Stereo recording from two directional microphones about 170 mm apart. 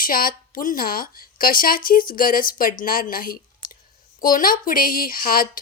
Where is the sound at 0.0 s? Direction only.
55° left (ahead or behind).